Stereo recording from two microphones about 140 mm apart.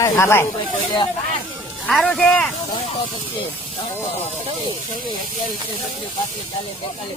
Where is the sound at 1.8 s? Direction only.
5° left (ahead or behind).